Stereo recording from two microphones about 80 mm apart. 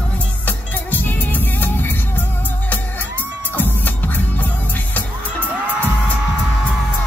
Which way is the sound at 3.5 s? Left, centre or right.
Left.